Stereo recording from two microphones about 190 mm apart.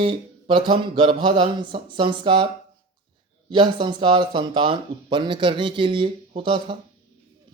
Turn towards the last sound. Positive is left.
turn(degrees=-25)  # may be behind; listen again after turning